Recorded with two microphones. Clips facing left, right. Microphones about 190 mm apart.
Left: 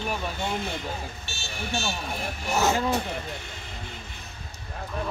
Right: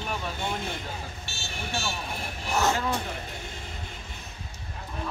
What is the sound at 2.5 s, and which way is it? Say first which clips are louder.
Speech: left 2 dB; 5° left (ahead or behind).